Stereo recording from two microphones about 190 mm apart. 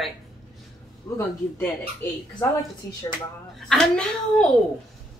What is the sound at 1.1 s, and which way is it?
Speech, 15° left (ahead or behind).